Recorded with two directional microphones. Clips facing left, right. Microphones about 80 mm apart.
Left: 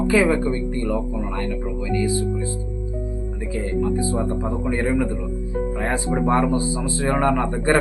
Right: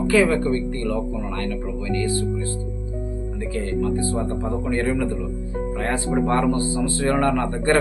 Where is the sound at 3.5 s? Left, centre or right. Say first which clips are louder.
Left 1 dB; centre.